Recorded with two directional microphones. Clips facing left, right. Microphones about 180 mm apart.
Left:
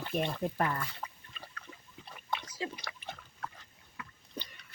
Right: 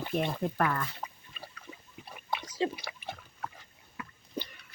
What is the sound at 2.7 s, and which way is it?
Pig, 10° right (ahead or behind).